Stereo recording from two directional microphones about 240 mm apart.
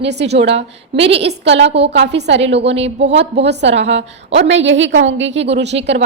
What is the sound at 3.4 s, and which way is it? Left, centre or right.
A woman's voice, right.